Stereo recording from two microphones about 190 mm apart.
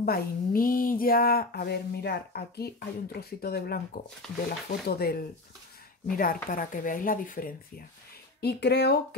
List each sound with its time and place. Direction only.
0.0 s speech: 50° left (ahead or behind)
8.4 s speech: 60° left (ahead or behind)